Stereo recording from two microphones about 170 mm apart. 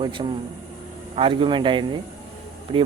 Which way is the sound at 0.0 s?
30° right (ahead or behind).